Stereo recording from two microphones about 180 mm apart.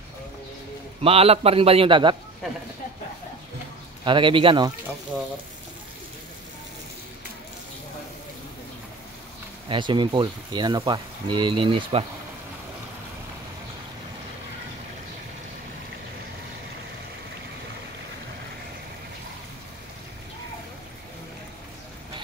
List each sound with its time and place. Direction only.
1.0 s a man's voice: 35° right (ahead or behind)
4.0 s speech: 25° right (ahead or behind)
9.7 s speech: 25° right (ahead or behind)